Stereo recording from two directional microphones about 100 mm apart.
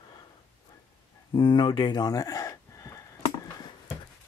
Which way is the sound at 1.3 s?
50° left (ahead or behind).